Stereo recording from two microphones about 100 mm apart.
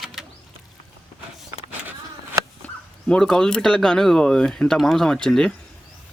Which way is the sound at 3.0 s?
5° left (ahead or behind).